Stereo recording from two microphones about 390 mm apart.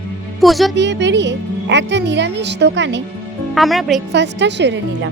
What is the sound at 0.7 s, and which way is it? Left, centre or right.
Speech, right.